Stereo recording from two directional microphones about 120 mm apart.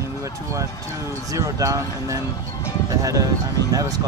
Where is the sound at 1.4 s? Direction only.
30° right (ahead or behind).